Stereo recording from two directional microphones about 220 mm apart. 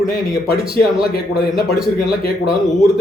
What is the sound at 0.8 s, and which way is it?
A man's voice, centre (ahead or behind).